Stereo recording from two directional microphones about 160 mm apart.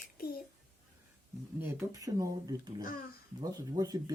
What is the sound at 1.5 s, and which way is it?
Speech, 15° right (ahead or behind).